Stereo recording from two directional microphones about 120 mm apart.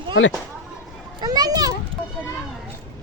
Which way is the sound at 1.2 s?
35° right (ahead or behind).